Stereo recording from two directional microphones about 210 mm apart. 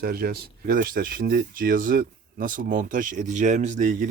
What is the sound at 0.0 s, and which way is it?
Speech, 45° right (ahead or behind).